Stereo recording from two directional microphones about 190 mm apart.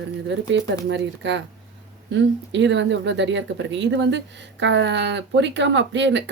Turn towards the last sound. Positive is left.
turn(degrees=-70)  # may be behind; listen again after turning